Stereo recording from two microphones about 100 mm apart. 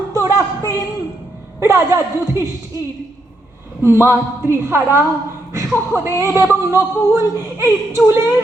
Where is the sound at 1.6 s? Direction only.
25° right (ahead or behind).